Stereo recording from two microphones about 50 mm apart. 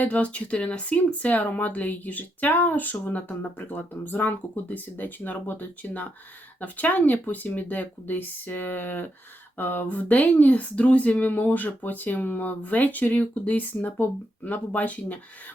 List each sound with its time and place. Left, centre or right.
0.0 s speech: left